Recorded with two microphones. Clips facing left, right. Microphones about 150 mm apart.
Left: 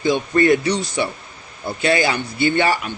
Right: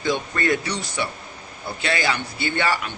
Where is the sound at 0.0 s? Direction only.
20° left (ahead or behind).